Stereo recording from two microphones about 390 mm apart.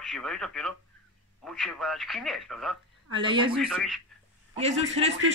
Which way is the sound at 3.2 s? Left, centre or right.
Centre.